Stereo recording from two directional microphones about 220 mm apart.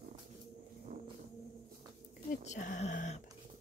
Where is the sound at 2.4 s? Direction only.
35° left (ahead or behind).